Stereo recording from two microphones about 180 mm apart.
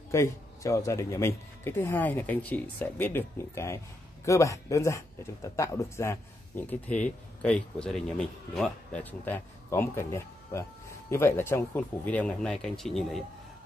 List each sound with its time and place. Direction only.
0.1 s speech: 15° left (ahead or behind)